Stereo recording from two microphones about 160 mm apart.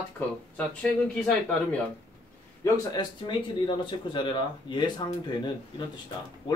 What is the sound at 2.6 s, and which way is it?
Speech, 25° left (ahead or behind).